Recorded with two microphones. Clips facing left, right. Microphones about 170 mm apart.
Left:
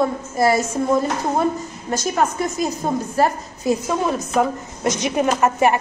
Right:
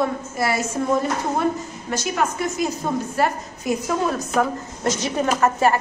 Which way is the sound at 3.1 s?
30° left (ahead or behind).